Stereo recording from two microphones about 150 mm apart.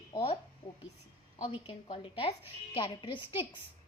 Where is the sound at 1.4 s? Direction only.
40° left (ahead or behind).